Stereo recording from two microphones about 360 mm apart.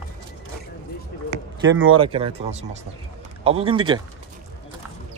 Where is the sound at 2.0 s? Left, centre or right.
Centre.